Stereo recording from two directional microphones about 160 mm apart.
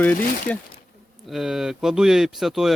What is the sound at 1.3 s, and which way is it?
Speech, centre (ahead or behind).